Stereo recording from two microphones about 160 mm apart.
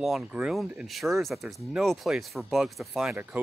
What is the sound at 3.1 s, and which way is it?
Speech, 10° right (ahead or behind).